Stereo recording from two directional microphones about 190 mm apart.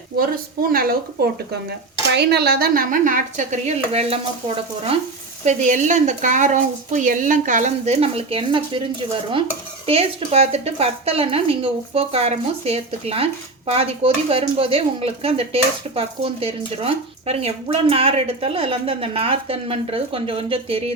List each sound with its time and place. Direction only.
0.7 s speech: 50° right (ahead or behind); by 4.2 s 35° right (ahead or behind)
5.5 s speech: 40° right (ahead or behind)
9.8 s speech: 30° right (ahead or behind)